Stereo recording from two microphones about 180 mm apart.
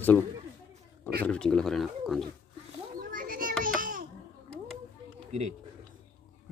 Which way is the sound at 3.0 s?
50° right (ahead or behind).